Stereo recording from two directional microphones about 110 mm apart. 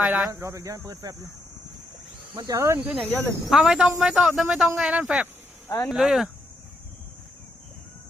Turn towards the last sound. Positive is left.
turn(degrees=-5)  # may be behind; listen again after turning